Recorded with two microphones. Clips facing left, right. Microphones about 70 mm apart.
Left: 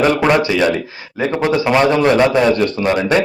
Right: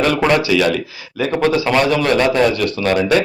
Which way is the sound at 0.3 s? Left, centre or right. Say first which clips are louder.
Left 1 dB; left.